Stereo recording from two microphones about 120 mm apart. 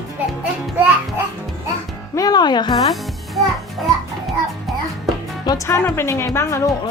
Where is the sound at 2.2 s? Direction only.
35° left (ahead or behind).